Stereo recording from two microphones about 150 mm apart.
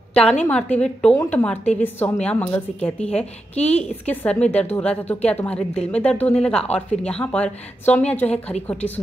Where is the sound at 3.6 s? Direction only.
45° left (ahead or behind).